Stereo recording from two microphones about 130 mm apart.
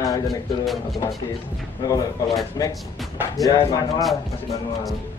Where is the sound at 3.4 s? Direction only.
25° left (ahead or behind).